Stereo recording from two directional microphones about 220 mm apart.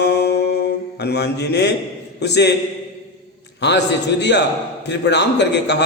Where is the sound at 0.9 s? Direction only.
50° left (ahead or behind).